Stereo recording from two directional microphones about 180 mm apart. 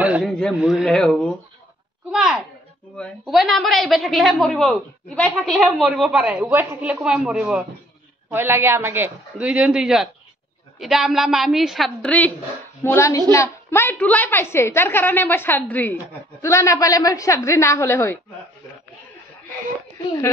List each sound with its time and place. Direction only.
0.0 s a man's voice: 5° right (ahead or behind); by 18.2 s 15° left (ahead or behind)